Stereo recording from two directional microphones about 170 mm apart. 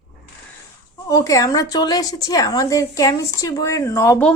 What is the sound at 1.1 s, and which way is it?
A woman's voice, 20° left (ahead or behind).